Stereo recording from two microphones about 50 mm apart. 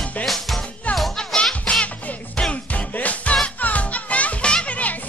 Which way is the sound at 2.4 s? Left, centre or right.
Left.